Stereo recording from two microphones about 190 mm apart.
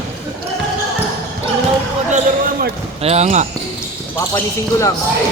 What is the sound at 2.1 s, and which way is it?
Basketball bounce, 50° right (ahead or behind).